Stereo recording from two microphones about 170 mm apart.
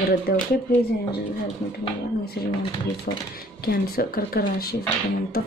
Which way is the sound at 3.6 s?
65° left (ahead or behind).